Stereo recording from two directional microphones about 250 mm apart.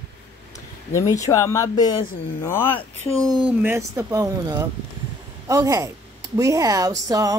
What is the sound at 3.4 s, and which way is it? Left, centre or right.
A woman's voice, centre.